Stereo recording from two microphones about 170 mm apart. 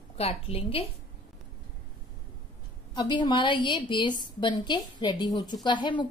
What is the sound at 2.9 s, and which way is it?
A woman's voice, 25° left (ahead or behind).